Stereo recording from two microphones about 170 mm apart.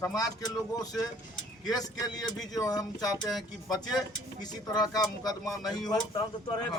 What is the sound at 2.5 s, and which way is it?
Speech, 20° left (ahead or behind).